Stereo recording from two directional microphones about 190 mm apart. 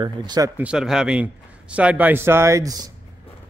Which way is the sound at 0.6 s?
5° right (ahead or behind).